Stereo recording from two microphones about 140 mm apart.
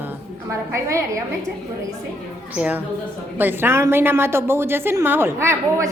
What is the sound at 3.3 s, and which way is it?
A woman's voice, 15° right (ahead or behind).